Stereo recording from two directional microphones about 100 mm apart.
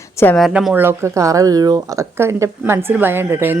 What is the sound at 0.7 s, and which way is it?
Speech, 25° right (ahead or behind).